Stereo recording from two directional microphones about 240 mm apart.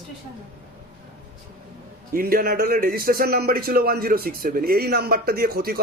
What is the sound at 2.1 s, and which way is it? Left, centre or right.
A man's voice, right.